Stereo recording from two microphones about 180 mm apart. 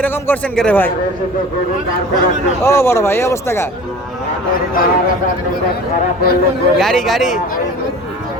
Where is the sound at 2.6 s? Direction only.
15° left (ahead or behind).